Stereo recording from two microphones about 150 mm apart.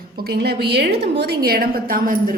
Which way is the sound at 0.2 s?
90° right.